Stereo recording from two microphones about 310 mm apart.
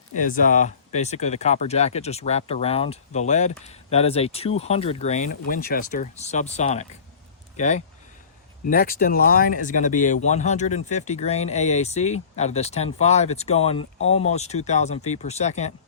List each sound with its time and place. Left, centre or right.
0.1 s speech: left